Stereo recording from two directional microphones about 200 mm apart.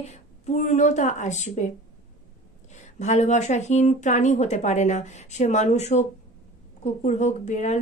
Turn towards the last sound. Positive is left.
turn(degrees=35)  # may be behind; listen again after turning